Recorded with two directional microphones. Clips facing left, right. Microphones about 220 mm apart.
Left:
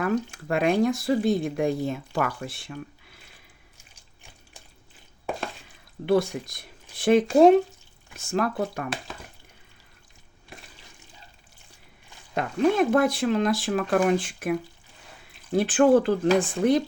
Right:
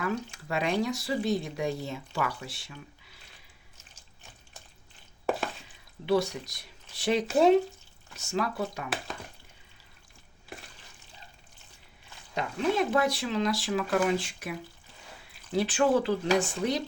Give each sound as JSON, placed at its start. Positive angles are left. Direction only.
{"t": 0.0, "sound": "speech", "side_deg": 50}
{"t": 6.1, "sound": "speech", "side_deg": 55}
{"t": 12.3, "sound": "speech", "side_deg": 55}